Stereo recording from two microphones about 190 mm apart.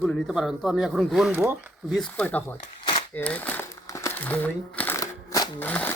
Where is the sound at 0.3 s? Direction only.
Centre (ahead or behind).